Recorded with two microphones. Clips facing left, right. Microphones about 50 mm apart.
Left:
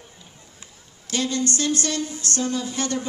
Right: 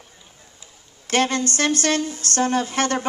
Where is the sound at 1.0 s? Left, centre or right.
Right.